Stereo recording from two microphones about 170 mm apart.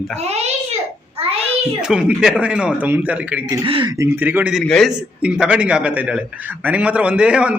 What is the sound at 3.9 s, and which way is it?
Speech, 15° right (ahead or behind).